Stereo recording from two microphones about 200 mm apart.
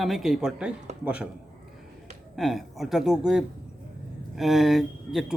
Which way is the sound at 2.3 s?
Centre (ahead or behind).